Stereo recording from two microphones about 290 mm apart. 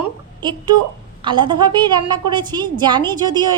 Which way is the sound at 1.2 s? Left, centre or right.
Centre.